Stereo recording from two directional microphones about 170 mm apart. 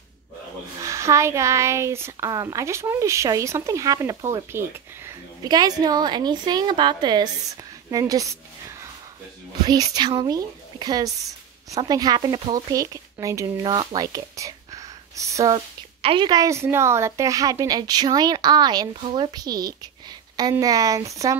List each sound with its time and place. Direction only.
0.7 s speech: 20° right (ahead or behind)
9.7 s speech: 25° right (ahead or behind)